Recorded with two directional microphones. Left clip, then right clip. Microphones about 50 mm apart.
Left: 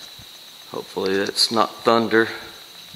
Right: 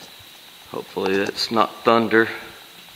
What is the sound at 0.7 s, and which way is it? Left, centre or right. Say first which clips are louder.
Speech: right 1 dB; centre.